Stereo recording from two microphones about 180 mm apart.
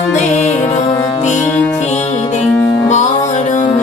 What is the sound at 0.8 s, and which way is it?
Music, 25° left (ahead or behind).